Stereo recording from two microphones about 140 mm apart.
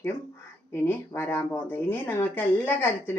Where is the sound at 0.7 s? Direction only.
15° left (ahead or behind).